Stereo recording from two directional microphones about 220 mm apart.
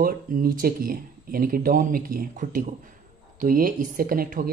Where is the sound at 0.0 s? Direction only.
40° right (ahead or behind).